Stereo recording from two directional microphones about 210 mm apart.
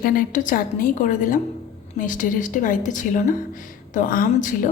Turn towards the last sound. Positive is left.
turn(degrees=40)  # may be behind; listen again after turning